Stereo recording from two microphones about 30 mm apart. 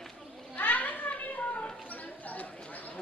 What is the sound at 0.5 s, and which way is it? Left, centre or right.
Children playing, left.